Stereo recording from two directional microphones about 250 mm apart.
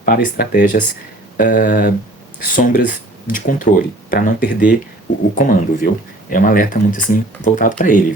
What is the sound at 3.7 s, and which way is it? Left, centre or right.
Speech, left.